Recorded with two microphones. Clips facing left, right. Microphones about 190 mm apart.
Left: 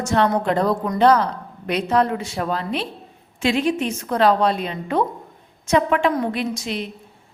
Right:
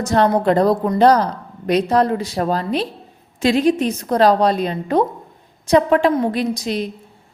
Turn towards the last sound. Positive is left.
turn(degrees=-40)  # may be behind; listen again after turning